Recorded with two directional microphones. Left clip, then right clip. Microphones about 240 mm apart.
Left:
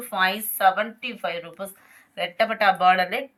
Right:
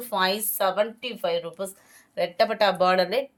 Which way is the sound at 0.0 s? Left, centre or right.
Right.